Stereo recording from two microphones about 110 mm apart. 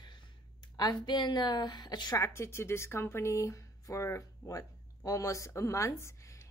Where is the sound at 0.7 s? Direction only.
40° left (ahead or behind).